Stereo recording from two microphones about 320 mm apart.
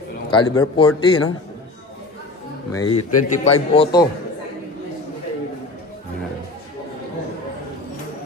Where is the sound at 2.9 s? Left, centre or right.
Left.